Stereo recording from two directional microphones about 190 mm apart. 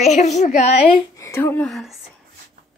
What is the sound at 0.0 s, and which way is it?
Speech, 35° left (ahead or behind).